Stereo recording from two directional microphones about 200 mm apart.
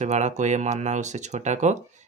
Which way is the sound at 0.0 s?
35° right (ahead or behind).